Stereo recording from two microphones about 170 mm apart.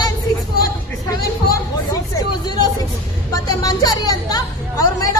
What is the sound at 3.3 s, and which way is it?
Speech, 20° left (ahead or behind).